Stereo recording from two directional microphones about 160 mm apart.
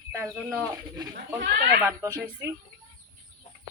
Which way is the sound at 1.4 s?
70° right (ahead or behind).